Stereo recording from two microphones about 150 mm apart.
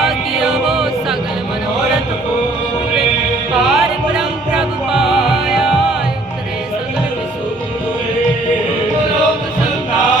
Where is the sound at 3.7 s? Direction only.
5° right (ahead or behind).